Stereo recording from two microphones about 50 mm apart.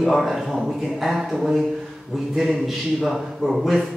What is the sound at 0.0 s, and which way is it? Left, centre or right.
A man's voice, centre.